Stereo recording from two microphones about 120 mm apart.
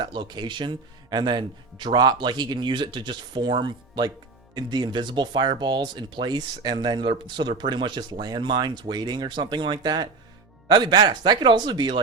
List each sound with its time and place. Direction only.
0.0 s speech: 40° right (ahead or behind)